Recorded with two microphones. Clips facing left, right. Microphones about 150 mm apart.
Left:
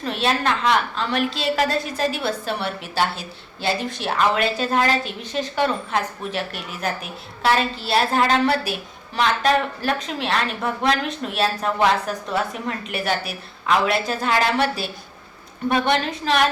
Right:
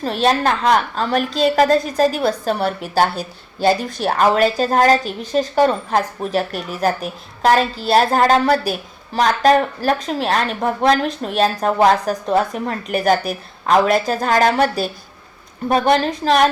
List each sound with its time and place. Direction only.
0.0 s a woman's voice: 40° right (ahead or behind)